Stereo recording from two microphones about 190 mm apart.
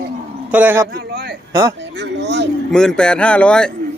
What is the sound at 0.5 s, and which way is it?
Speech, 10° right (ahead or behind).